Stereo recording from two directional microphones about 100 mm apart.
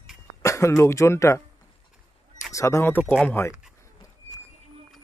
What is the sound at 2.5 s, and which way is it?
Speech, 30° left (ahead or behind).